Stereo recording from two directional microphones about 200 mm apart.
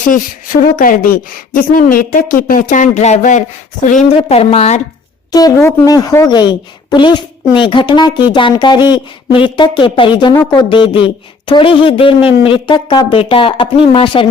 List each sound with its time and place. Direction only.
0.1 s a woman's voice: 45° left (ahead or behind)
5.3 s speech: 20° left (ahead or behind)